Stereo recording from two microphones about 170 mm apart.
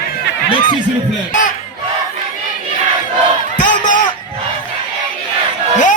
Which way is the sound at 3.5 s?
50° left (ahead or behind).